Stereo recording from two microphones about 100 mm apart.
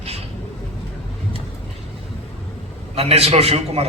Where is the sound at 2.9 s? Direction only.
85° right.